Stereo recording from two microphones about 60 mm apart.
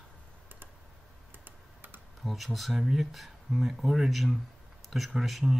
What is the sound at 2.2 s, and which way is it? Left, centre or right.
Speech, centre.